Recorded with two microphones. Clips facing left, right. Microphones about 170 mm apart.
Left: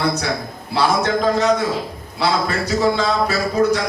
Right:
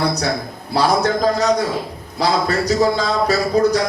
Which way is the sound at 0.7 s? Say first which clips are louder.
Right 1 dB; 40° right (ahead or behind).